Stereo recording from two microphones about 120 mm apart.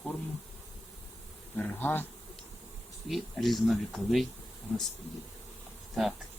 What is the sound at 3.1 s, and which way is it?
Speech, centre (ahead or behind).